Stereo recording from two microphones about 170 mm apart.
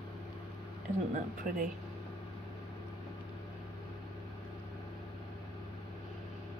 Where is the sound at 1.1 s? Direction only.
50° right (ahead or behind).